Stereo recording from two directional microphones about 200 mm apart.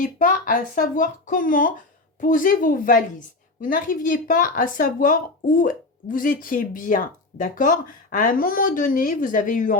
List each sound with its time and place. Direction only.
0.0 s a woman's voice: 40° left (ahead or behind)